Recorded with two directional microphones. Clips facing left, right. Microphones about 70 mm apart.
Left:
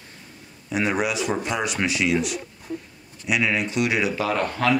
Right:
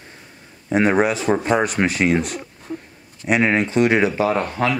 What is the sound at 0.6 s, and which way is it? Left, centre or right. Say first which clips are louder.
Speech: right 7 dB; right.